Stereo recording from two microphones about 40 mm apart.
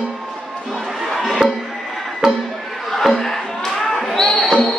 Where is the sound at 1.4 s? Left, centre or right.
Centre.